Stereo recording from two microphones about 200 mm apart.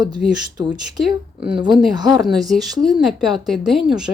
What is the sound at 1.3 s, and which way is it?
Speech, 5° right (ahead or behind).